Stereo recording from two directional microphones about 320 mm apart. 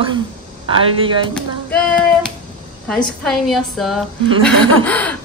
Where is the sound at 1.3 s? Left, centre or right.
Centre.